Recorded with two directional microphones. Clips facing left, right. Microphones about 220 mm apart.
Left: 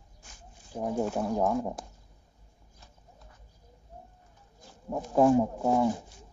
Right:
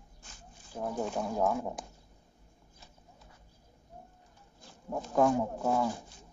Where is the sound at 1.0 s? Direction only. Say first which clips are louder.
Left 2 dB; 5° left (ahead or behind).